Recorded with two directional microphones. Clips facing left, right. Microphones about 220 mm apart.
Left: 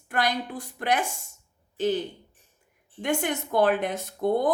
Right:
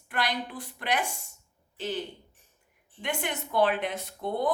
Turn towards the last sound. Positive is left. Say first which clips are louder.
# left 5 dB
turn(degrees=45)  # may be behind; listen again after turning